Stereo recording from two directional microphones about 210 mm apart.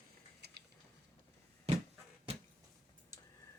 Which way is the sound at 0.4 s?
50° right (ahead or behind).